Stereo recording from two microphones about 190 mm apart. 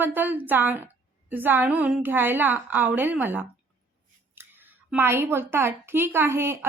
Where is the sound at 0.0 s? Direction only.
10° right (ahead or behind).